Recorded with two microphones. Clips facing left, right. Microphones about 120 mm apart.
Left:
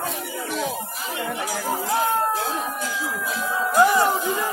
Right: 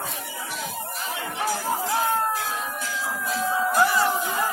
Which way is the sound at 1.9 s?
20° left (ahead or behind).